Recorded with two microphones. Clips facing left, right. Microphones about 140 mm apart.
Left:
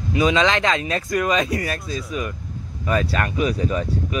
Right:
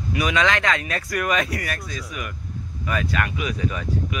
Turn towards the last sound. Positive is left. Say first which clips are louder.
# left 3 dB
turn(degrees=35)  # may be behind; listen again after turning